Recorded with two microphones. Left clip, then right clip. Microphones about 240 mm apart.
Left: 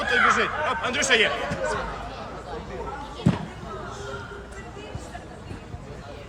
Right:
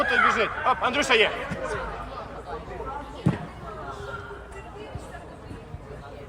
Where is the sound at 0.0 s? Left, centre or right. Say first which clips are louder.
Left 1 dB; centre.